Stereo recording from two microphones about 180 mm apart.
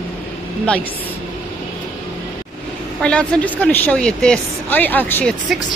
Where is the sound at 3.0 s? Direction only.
5° left (ahead or behind).